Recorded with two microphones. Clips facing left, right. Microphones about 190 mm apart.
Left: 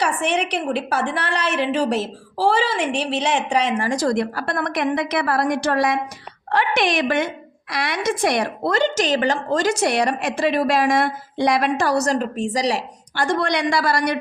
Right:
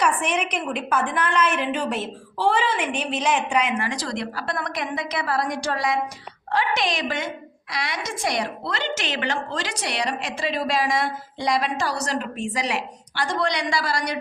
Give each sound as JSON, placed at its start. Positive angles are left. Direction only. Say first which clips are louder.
{"t": 0.0, "sound": "a woman's voice", "louder": "left 2 dB", "side_deg": 35}
{"t": 13.2, "sound": "speech", "louder": "left 4 dB", "side_deg": 55}